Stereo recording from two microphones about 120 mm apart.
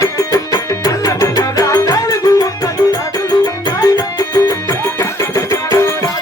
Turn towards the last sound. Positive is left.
turn(degrees=25)  # may be behind; listen again after turning